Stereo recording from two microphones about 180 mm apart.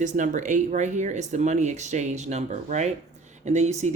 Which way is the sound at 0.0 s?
45° right (ahead or behind).